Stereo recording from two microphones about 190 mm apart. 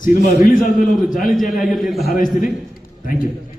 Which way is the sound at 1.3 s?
Centre (ahead or behind).